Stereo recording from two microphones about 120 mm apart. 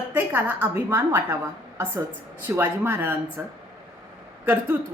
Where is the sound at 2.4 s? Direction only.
15° right (ahead or behind).